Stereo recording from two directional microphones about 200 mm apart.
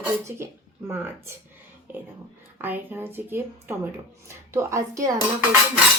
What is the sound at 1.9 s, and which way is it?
Speech, 10° right (ahead or behind).